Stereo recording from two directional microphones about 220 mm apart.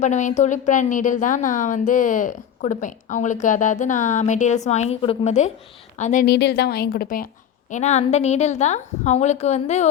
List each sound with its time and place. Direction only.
0.0 s a woman's voice: 35° left (ahead or behind)